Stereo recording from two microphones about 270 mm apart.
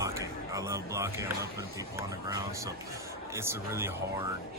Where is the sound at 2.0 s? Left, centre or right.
Centre.